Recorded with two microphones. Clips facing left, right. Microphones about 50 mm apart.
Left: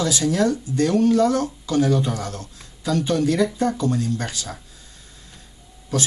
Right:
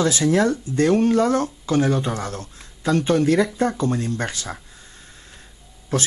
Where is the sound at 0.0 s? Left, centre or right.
Right.